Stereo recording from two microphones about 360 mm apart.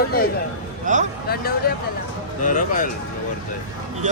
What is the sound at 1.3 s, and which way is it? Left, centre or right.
Speech, left.